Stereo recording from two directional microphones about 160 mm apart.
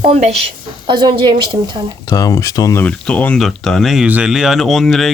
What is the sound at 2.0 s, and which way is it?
Speech, 20° left (ahead or behind).